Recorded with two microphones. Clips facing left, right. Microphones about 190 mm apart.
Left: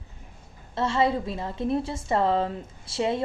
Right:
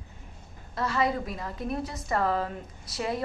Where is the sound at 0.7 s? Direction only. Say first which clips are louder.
Left 4 dB; 25° left (ahead or behind).